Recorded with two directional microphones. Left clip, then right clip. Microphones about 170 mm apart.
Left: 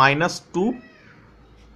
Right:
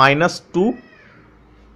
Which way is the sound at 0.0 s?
20° right (ahead or behind).